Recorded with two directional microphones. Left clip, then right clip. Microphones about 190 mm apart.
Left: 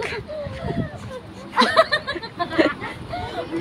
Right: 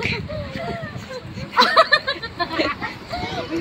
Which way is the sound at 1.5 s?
20° left (ahead or behind).